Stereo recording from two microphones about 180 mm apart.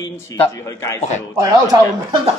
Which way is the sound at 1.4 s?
20° right (ahead or behind).